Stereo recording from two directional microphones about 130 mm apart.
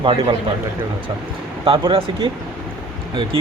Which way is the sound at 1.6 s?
45° right (ahead or behind).